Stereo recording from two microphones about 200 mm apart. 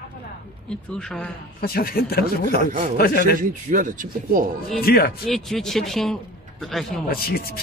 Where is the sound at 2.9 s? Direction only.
50° left (ahead or behind).